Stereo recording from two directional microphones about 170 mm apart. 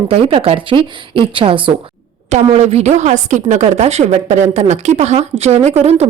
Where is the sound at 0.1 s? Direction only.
35° right (ahead or behind).